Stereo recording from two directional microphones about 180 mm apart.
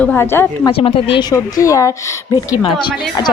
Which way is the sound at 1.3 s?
15° left (ahead or behind).